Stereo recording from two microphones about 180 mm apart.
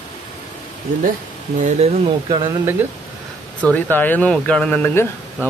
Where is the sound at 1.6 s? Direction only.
35° right (ahead or behind).